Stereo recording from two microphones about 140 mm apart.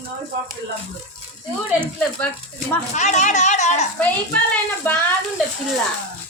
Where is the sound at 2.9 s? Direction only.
55° left (ahead or behind).